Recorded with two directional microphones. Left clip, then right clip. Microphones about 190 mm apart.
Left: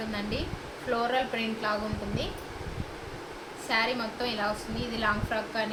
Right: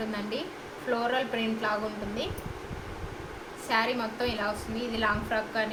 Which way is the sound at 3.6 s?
15° right (ahead or behind).